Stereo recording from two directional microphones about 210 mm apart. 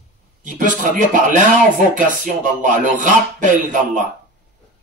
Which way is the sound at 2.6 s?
40° right (ahead or behind).